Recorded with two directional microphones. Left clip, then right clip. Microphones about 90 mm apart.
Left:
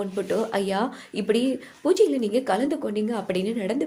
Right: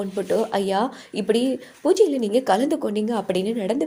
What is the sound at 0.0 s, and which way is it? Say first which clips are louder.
A woman's voice: right 3 dB; 20° right (ahead or behind).